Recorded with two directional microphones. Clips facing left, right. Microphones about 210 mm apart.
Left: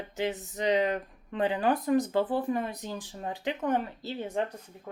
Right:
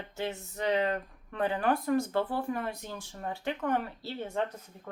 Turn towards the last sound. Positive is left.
turn(degrees=20)  # may be behind; listen again after turning